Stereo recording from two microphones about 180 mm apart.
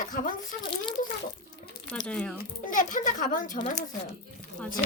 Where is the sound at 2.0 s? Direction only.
5° left (ahead or behind).